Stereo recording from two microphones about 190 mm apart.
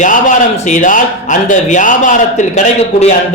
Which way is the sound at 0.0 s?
40° left (ahead or behind).